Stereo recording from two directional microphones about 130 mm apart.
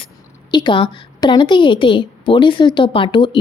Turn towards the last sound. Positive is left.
turn(degrees=40)  # may be behind; listen again after turning